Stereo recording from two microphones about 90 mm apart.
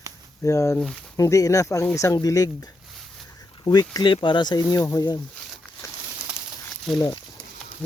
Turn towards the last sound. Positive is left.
turn(degrees=0)  # may be behind; listen again after turning